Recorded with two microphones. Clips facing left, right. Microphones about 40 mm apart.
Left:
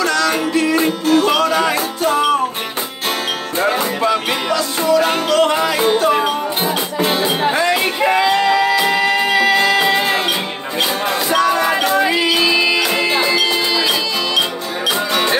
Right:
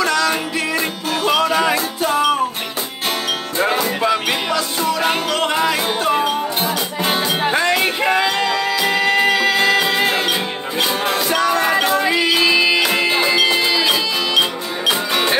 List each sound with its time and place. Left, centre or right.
0.0 s music: centre
4.0 s music: centre
4.9 s music: right
7.0 s music: left
9.0 s music: right
9.8 s music: centre
11.8 s music: centre